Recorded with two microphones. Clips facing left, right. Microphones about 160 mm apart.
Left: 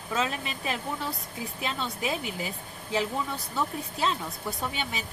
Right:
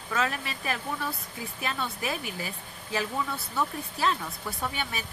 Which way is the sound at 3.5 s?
20° left (ahead or behind).